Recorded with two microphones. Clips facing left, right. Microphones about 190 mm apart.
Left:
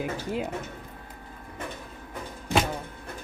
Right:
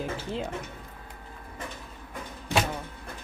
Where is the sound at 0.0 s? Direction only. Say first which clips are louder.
Left 2 dB; 10° left (ahead or behind).